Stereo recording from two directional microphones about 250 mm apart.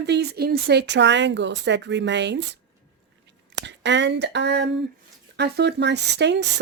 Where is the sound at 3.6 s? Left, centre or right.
Right.